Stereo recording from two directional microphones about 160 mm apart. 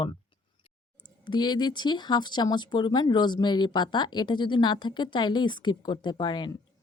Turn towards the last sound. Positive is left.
turn(degrees=25)  # may be behind; listen again after turning